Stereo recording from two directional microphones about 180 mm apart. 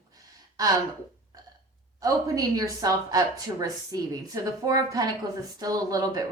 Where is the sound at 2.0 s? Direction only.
20° right (ahead or behind).